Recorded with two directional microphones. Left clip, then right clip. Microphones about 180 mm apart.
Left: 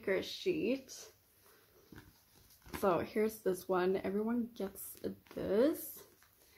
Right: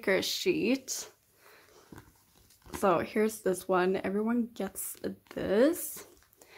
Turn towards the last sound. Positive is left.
turn(degrees=-30)  # may be behind; listen again after turning